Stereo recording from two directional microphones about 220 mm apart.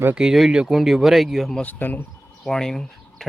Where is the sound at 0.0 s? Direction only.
5° right (ahead or behind).